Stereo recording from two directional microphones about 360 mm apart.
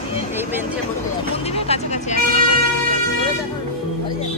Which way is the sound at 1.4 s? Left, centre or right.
Centre.